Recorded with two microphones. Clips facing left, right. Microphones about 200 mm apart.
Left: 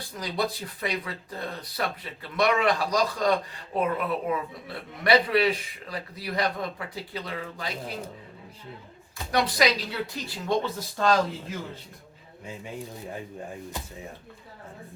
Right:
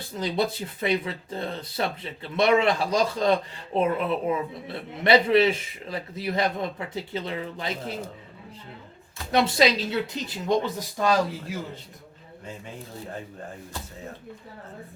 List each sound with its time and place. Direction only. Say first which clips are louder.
0.1 s speech: right 4 dB; 25° right (ahead or behind)
9.3 s speech: right 3 dB; 25° right (ahead or behind)